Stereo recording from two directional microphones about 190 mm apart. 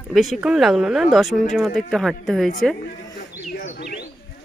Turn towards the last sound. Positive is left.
turn(degrees=45)  # may be behind; listen again after turning